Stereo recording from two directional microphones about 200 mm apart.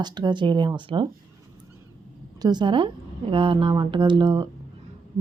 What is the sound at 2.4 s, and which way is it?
A woman's voice, 20° right (ahead or behind).